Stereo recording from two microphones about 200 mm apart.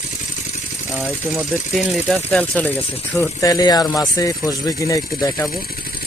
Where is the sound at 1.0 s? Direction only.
10° right (ahead or behind); by 5.5 s 15° left (ahead or behind).